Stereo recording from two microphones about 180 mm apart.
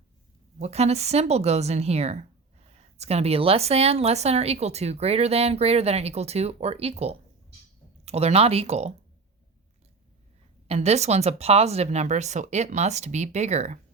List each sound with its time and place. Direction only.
0.6 s speech: 35° right (ahead or behind)
10.7 s speech: 35° right (ahead or behind)